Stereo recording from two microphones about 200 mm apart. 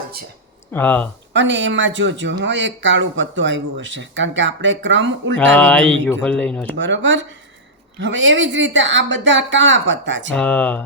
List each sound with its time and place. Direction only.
0.7 s speech: 10° left (ahead or behind)
1.3 s speech: 65° right (ahead or behind)
5.5 s speech: 5° left (ahead or behind)
6.7 s speech: 65° right (ahead or behind)
10.3 s speech: 5° left (ahead or behind)